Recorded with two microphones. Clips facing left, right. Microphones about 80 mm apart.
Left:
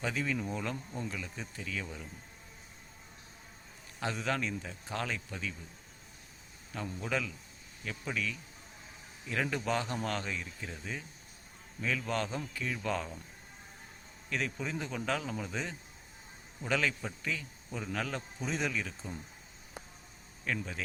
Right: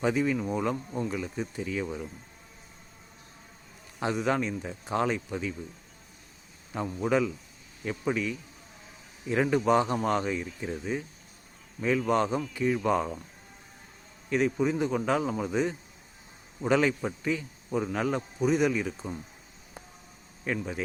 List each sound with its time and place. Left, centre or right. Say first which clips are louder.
0.0 s speech: right 8 dB; centre
4.0 s speech: right 7 dB; centre
7.0 s speech: right 10 dB; right
12.0 s speech: right 9 dB; centre
14.3 s speech: right 10 dB; centre
16.6 s speech: right 8 dB; right
20.4 s speech: right 5 dB; centre